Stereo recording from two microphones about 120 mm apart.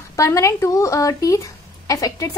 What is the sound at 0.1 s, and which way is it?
A woman's voice, 25° left (ahead or behind).